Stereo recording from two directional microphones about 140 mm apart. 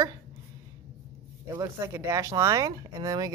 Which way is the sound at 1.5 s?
20° right (ahead or behind).